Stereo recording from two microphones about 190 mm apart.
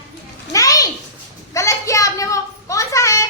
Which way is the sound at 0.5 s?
20° left (ahead or behind).